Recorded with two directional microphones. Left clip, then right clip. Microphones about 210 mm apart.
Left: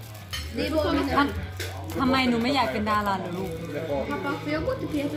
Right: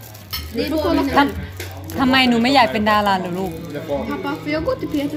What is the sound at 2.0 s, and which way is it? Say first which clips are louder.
A woman's voice: right 8 dB; 45° right (ahead or behind).